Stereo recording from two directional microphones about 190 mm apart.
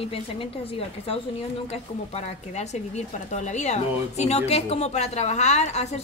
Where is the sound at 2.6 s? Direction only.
35° left (ahead or behind).